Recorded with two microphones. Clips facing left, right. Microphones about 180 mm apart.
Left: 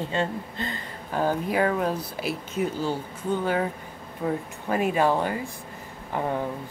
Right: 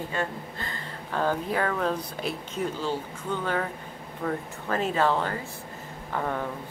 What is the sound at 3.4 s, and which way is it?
Speech, 15° left (ahead or behind).